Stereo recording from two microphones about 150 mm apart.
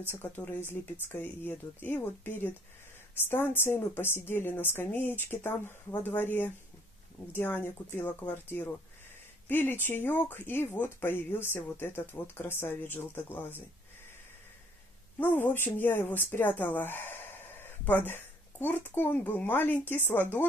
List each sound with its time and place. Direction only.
0.1 s speech: 10° left (ahead or behind)
15.1 s speech: 15° left (ahead or behind)